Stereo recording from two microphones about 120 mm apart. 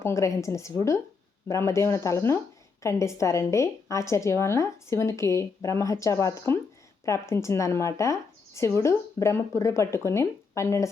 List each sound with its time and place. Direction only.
0.0 s speech: 25° left (ahead or behind)